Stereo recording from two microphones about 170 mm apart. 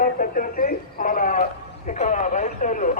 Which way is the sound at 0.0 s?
55° left (ahead or behind).